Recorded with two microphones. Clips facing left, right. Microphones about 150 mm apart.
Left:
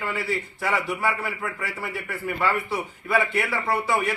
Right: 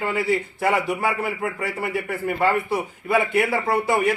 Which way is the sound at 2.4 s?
45° right (ahead or behind).